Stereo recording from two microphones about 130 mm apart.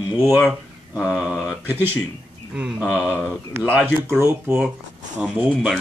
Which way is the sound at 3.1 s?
10° left (ahead or behind).